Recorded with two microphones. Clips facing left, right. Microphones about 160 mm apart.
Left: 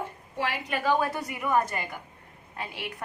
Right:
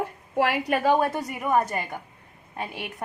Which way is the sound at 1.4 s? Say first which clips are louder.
Right 2 dB; 40° right (ahead or behind).